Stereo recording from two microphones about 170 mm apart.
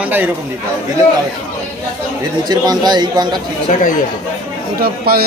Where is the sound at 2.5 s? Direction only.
25° right (ahead or behind).